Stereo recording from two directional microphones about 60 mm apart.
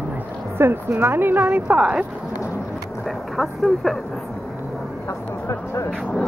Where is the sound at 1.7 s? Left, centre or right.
Centre.